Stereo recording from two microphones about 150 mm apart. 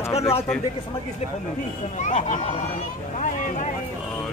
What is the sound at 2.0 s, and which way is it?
Speech, 50° left (ahead or behind).